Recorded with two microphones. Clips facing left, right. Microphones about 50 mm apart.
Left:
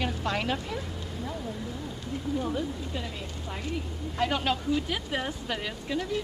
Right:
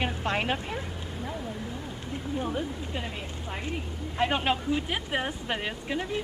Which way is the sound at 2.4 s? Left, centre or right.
Right.